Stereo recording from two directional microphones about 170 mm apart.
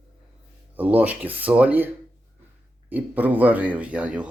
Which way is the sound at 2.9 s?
10° right (ahead or behind).